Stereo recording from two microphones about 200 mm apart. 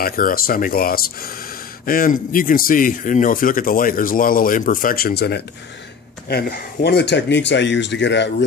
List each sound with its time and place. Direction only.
0.0 s speech: 45° left (ahead or behind)